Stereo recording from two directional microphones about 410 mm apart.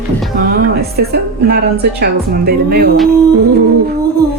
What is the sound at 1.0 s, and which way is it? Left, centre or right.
Speech, right.